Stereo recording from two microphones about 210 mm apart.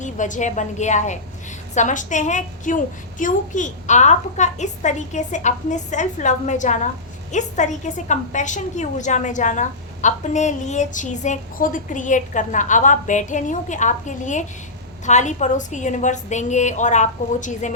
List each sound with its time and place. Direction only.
0.0 s a woman's voice: 35° left (ahead or behind)